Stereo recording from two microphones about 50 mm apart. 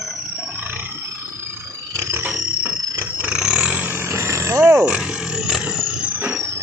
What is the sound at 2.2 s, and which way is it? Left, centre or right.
Music, right.